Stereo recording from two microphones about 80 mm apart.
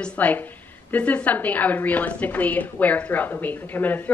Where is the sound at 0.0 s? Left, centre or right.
Centre.